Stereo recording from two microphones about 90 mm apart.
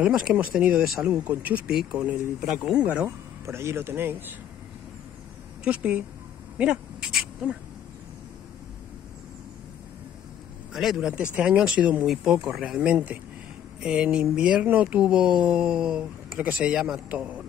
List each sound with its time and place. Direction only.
0.0 s speech: 10° right (ahead or behind)
2.4 s speech: 5° right (ahead or behind)
3.4 s speech: 30° right (ahead or behind)
5.6 s speech: 15° right (ahead or behind)
10.7 s speech: 5° right (ahead or behind)
12.1 s speech: 5° right (ahead or behind)